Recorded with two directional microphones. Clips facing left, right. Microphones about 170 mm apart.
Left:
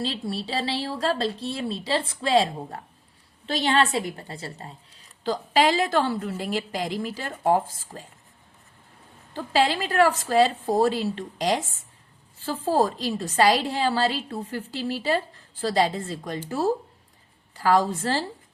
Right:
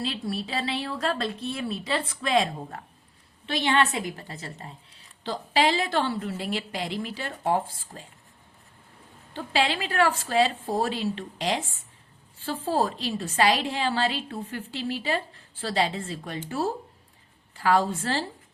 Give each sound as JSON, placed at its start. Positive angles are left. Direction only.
{"t": 0.0, "sound": "a woman's voice", "side_deg": 35}
{"t": 9.3, "sound": "speech", "side_deg": 40}
{"t": 17.5, "sound": "speech", "side_deg": 40}